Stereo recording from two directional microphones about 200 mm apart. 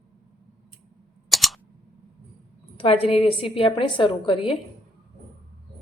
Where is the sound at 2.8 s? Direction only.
30° left (ahead or behind).